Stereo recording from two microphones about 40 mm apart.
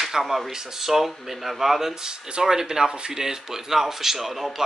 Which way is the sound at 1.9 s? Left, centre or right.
Centre.